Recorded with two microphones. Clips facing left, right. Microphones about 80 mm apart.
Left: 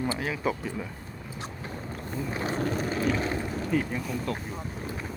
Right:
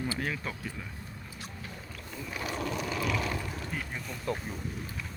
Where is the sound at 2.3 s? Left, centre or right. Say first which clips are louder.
Left 4 dB; left.